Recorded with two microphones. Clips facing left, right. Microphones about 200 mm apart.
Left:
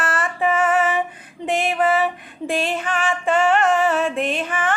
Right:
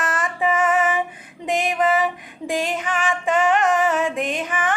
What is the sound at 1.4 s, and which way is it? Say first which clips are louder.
Female singing: left 1 dB; 15° right (ahead or behind).